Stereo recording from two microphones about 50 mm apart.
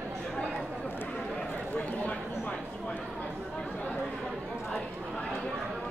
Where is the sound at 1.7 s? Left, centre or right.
Left.